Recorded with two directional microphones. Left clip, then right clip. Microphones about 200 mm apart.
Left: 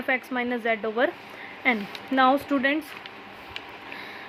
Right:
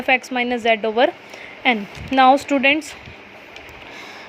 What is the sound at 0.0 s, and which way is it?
A woman's voice, 20° right (ahead or behind).